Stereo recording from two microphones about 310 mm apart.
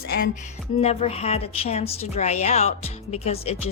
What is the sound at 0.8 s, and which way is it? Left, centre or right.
A woman's voice, centre.